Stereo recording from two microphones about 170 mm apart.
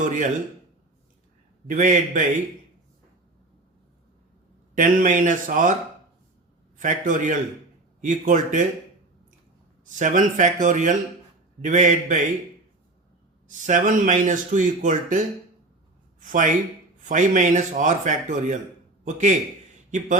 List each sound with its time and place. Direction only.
0.0 s speech: 50° right (ahead or behind)
1.6 s speech: 50° right (ahead or behind)
4.7 s speech: 50° right (ahead or behind)
6.7 s speech: 50° right (ahead or behind)
9.8 s speech: 50° right (ahead or behind)
13.5 s speech: 45° right (ahead or behind)
16.2 s a man's voice: 50° right (ahead or behind)